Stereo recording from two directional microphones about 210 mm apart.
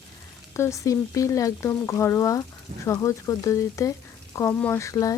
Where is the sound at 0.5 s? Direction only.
15° left (ahead or behind).